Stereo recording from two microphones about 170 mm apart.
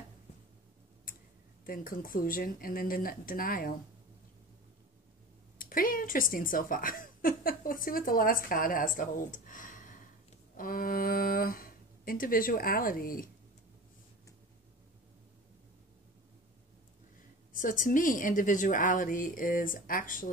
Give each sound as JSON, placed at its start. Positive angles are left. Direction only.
{"t": 1.7, "sound": "speech", "side_deg": 55}
{"t": 5.6, "sound": "speech", "side_deg": 55}
{"t": 17.6, "sound": "a woman's voice", "side_deg": 50}